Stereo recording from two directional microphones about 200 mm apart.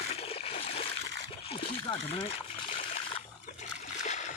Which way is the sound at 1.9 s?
30° left (ahead or behind).